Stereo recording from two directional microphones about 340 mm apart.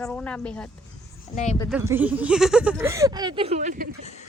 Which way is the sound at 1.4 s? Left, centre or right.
Centre.